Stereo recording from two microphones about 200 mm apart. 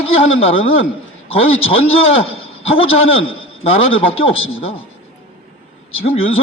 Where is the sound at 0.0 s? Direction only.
30° left (ahead or behind).